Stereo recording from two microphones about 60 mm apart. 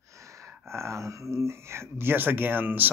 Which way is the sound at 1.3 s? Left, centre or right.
Right.